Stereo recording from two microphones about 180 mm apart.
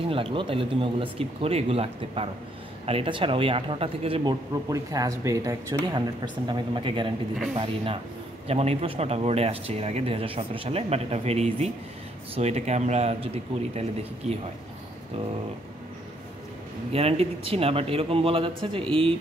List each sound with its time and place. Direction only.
0.0 s speech: 30° right (ahead or behind)
16.9 s speech: 35° right (ahead or behind)